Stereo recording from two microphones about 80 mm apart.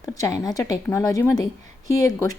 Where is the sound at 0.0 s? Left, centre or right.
Left.